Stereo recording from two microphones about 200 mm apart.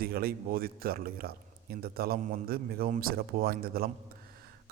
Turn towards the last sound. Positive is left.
turn(degrees=-50)  # may be behind; listen again after turning